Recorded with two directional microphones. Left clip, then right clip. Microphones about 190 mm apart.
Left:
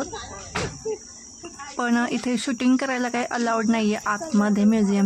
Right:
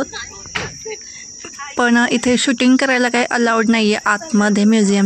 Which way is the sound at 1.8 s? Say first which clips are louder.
Right 9 dB; 25° right (ahead or behind).